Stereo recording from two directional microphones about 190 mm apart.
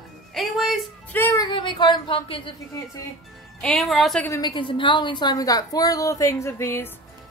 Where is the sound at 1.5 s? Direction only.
25° left (ahead or behind).